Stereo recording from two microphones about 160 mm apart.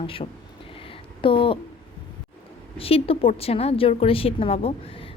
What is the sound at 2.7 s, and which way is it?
A woman's voice, 35° left (ahead or behind).